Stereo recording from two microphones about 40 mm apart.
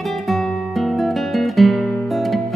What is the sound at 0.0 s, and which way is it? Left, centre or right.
Music, centre.